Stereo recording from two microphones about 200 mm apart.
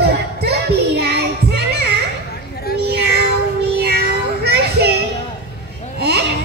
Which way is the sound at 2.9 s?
55° right (ahead or behind).